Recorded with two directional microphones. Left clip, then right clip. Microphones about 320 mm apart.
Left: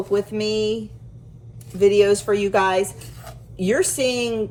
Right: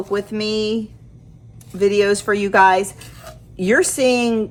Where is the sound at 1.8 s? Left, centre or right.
Right.